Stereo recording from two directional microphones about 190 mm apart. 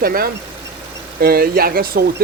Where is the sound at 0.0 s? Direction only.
50° right (ahead or behind).